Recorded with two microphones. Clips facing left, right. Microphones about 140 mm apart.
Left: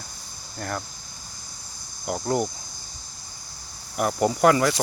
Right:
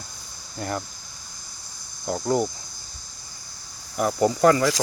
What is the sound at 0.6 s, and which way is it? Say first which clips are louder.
Speech: right 2 dB; 5° right (ahead or behind).